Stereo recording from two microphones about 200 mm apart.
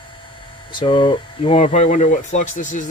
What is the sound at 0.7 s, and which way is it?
Speech, 25° left (ahead or behind).